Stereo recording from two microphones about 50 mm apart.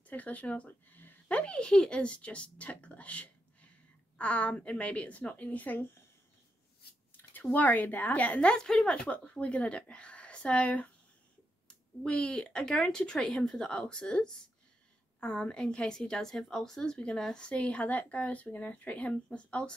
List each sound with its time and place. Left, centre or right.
0.0 s speech: left
1.3 s a woman's voice: left
7.5 s a woman's voice: left